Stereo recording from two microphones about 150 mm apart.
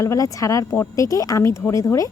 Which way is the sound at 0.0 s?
20° left (ahead or behind).